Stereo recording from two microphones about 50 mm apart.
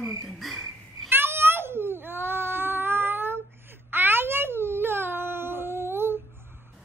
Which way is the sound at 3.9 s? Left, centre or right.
Right.